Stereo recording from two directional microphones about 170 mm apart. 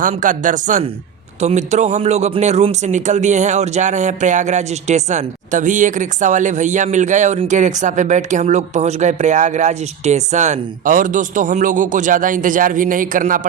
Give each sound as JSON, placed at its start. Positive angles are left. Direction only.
{"t": 0.0, "sound": "speech", "side_deg": -50}